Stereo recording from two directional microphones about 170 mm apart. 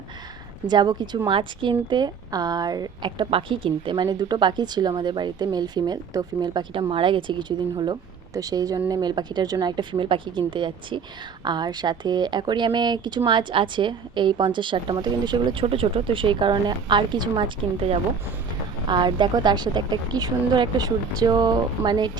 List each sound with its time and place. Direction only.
0.7 s a woman's voice: 25° right (ahead or behind)